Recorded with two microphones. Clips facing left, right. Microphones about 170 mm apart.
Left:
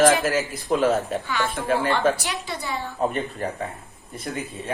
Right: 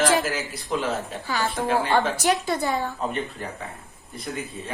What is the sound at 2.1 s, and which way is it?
Speech, 45° right (ahead or behind).